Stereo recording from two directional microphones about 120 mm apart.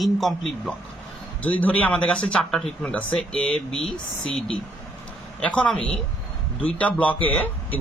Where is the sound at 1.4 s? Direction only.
15° left (ahead or behind).